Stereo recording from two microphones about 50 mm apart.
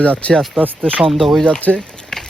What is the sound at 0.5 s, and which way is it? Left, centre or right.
Speech, right.